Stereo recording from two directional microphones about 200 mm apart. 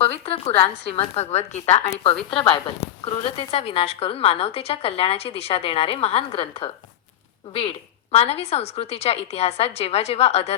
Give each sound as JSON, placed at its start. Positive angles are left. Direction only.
{"t": 0.0, "sound": "a woman's voice", "side_deg": 30}
{"t": 8.1, "sound": "a woman's voice", "side_deg": 30}